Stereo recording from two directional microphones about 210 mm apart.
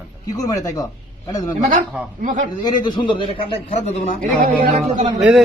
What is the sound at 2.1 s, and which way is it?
Speech, 40° right (ahead or behind).